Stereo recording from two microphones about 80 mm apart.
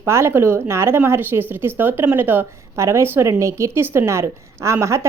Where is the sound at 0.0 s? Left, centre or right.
Right.